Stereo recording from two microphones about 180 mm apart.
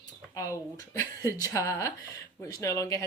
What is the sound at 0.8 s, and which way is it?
Speech, 20° left (ahead or behind).